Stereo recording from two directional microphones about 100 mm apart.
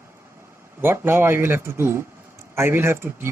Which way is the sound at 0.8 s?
20° right (ahead or behind).